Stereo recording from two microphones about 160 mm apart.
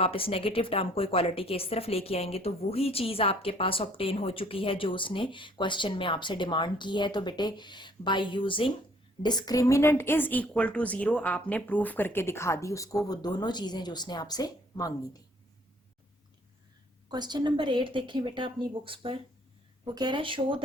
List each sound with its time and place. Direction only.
0.0 s a woman's voice: 35° left (ahead or behind)
17.1 s a woman's voice: 25° right (ahead or behind)